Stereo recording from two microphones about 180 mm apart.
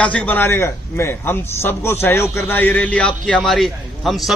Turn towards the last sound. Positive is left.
turn(degrees=0)  # may be behind; listen again after turning